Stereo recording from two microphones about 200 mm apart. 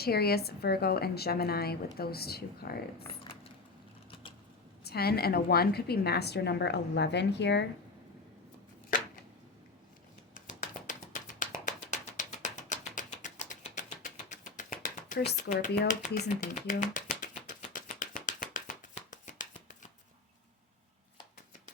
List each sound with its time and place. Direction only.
0.0 s a woman's voice: 50° left (ahead or behind)
3.1 s a sound: 30° left (ahead or behind)
4.1 s mechanisms: 25° left (ahead or behind)
4.8 s a woman's voice: 50° left (ahead or behind)
10.3 s a sound: 40° left (ahead or behind)
15.9 s speech: 40° left (ahead or behind)
17.7 s shuffling cards: 45° left (ahead or behind)